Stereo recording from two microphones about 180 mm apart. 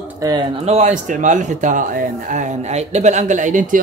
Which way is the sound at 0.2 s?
20° right (ahead or behind).